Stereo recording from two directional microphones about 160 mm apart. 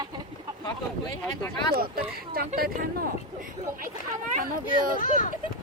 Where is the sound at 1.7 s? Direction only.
65° right (ahead or behind).